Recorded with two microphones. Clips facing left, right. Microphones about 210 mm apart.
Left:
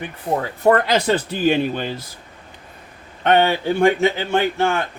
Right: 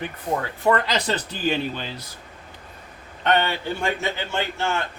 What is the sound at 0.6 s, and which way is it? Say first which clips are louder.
Speech: left 6 dB; 50° left (ahead or behind).